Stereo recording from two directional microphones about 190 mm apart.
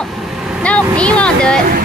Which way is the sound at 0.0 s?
Centre (ahead or behind).